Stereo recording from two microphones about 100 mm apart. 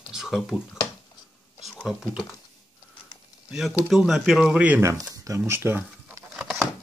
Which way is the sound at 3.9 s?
5° right (ahead or behind).